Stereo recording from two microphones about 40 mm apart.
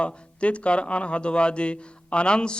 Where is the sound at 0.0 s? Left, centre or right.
Left.